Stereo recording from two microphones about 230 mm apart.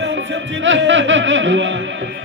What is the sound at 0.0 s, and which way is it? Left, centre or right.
Music, right.